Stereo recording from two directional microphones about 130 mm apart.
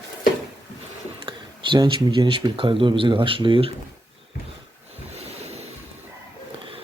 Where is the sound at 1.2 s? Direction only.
40° right (ahead or behind).